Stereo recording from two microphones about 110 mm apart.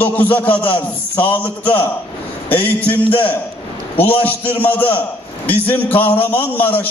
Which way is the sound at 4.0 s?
15° left (ahead or behind).